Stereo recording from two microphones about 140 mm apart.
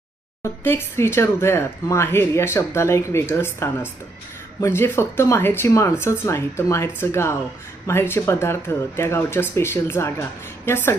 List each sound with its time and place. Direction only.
0.4 s speech: 20° left (ahead or behind)